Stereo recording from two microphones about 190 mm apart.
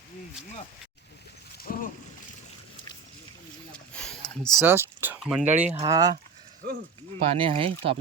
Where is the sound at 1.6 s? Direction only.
50° left (ahead or behind).